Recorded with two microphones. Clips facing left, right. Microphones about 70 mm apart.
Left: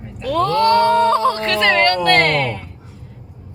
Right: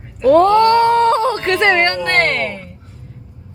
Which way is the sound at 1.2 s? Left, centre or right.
Right.